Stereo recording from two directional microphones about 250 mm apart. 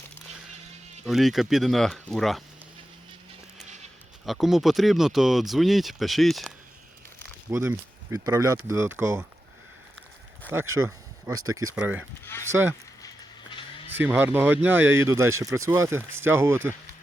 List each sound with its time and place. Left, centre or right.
1.0 s speech: centre
4.3 s speech: centre
7.5 s speech: centre
10.4 s speech: centre
11.3 s speech: right
11.7 s speech: centre
12.2 s speech: centre
12.5 s speech: centre
13.9 s speech: centre